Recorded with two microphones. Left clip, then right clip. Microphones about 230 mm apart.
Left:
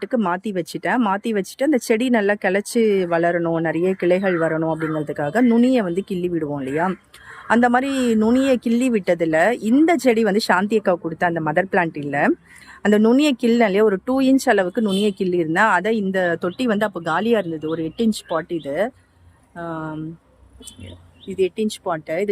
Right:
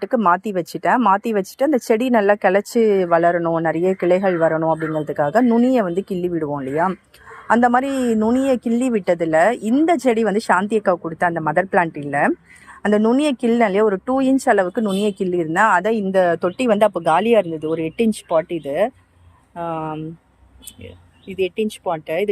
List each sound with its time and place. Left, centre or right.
0.0 s a woman's voice: centre
19.5 s speech: centre
21.2 s speech: left